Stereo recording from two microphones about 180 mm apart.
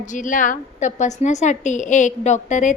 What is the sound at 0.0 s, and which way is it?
A woman's voice, 45° left (ahead or behind).